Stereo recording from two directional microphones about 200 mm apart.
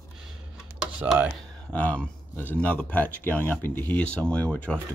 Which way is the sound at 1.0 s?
15° right (ahead or behind).